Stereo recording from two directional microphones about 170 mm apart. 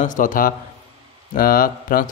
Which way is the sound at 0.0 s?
50° left (ahead or behind).